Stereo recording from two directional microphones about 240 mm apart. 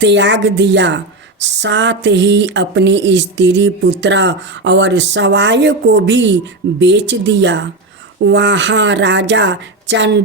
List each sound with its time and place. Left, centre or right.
0.0 s a woman's voice: right